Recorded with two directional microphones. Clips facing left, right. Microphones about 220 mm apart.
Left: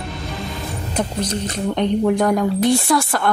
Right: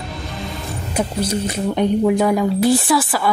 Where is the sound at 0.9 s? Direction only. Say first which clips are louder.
Right 2 dB; 10° right (ahead or behind).